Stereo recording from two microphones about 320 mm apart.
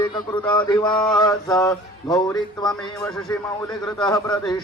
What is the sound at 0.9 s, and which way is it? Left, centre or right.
A man's voice, centre.